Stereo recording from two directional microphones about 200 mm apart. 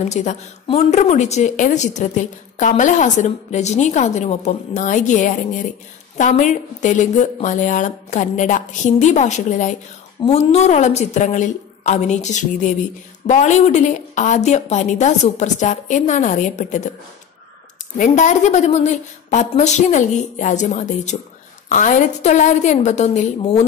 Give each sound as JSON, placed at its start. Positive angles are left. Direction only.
{"t": 0.0, "sound": "a woman's voice", "side_deg": 35}
{"t": 17.9, "sound": "a woman's voice", "side_deg": 40}